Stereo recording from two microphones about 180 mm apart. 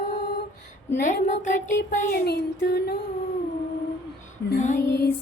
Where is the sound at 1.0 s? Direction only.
45° left (ahead or behind).